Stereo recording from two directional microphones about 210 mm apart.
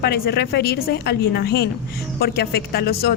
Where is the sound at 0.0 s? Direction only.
50° left (ahead or behind).